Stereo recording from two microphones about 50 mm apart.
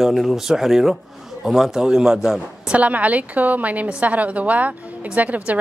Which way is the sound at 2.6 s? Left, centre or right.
Right.